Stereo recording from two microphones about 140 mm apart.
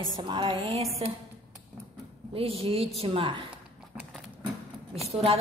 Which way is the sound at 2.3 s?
45° right (ahead or behind).